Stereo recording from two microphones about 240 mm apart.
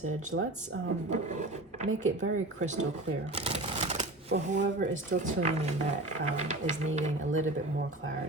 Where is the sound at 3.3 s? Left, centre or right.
Right.